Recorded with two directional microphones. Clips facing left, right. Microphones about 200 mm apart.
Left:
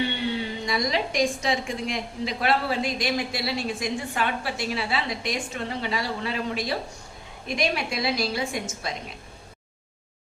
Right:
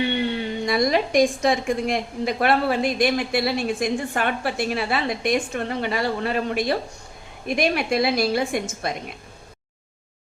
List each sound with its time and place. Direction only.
0.6 s a woman's voice: 55° right (ahead or behind)